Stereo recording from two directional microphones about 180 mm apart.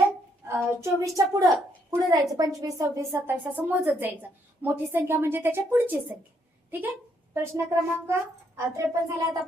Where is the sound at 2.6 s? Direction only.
15° right (ahead or behind).